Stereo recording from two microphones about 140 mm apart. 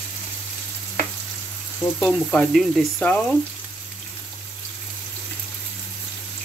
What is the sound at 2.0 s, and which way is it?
Frying, 10° left (ahead or behind).